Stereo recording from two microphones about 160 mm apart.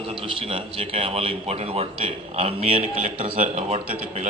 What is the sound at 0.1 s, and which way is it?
A man's voice, 35° right (ahead or behind).